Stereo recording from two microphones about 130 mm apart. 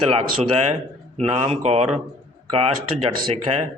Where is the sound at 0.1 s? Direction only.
50° right (ahead or behind).